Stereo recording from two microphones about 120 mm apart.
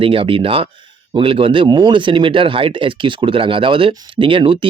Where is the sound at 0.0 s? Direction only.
50° right (ahead or behind).